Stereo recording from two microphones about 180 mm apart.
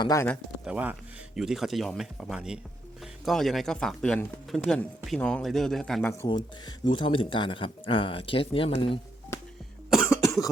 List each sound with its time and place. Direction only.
0.0 s speech: 15° left (ahead or behind)
0.6 s speech: 5° right (ahead or behind)
6.1 s speech: 25° left (ahead or behind)
9.9 s cough: centre (ahead or behind)